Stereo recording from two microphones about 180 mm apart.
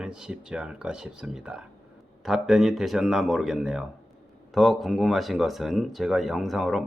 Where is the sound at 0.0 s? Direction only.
5° right (ahead or behind).